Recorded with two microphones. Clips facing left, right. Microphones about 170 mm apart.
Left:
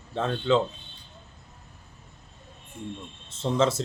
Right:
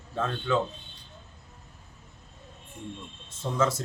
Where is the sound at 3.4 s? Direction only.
25° left (ahead or behind).